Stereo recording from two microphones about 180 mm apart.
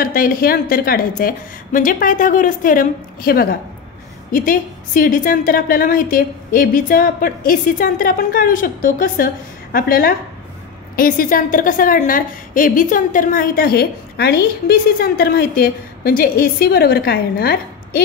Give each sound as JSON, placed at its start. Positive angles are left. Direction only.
{"t": 0.0, "sound": "a woman's voice", "side_deg": 55}